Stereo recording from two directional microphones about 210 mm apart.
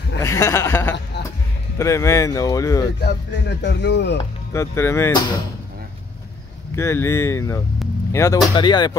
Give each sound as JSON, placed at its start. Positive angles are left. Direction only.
{"t": 0.2, "sound": "speech", "side_deg": 15}
{"t": 3.0, "sound": "speech", "side_deg": 50}
{"t": 4.5, "sound": "speech", "side_deg": 10}
{"t": 6.7, "sound": "speech", "side_deg": 15}